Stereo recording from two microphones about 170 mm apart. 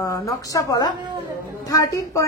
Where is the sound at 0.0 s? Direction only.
20° left (ahead or behind).